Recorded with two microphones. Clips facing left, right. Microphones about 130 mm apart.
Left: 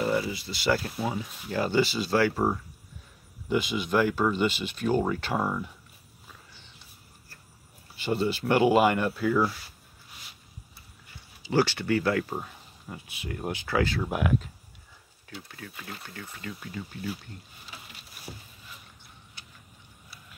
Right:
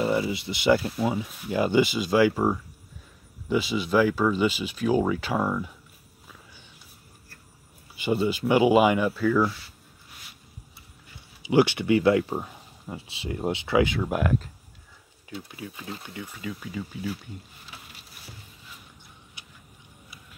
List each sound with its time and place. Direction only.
0.0 s speech: 20° right (ahead or behind)
3.4 s speech: centre (ahead or behind)
7.9 s speech: 10° right (ahead or behind)
11.5 s speech: 20° right (ahead or behind)
14.0 s speech: centre (ahead or behind)
15.4 s speech: 15° right (ahead or behind)